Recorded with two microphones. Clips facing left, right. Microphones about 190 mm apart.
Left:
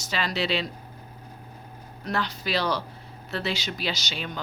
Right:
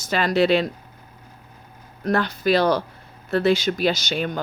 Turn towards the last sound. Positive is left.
turn(degrees=-50)  # may be behind; listen again after turning